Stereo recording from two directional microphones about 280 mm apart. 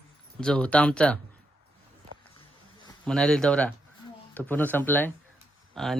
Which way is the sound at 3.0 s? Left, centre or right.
Centre.